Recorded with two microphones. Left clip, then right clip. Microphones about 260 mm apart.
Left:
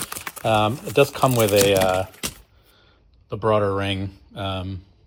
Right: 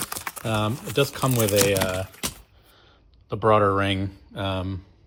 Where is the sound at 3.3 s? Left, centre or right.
Right.